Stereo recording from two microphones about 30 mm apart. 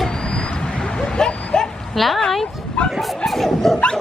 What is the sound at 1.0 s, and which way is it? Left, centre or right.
Bow-wow, left.